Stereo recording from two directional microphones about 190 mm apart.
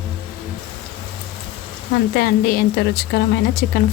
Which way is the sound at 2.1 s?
55° left (ahead or behind).